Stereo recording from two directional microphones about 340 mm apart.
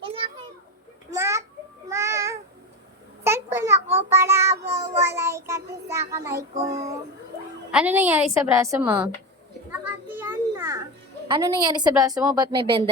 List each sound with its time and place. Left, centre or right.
0.0 s children playing: centre
1.1 s a sound: centre
1.9 s babbling: centre
3.2 s a sound: centre
4.5 s meow: centre
5.0 s music: centre
7.7 s a woman's voice: centre
9.8 s children playing: centre
11.3 s a woman's voice: centre